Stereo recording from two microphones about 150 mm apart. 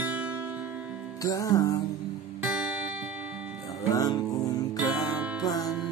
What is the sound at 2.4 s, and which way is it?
Music, 5° right (ahead or behind).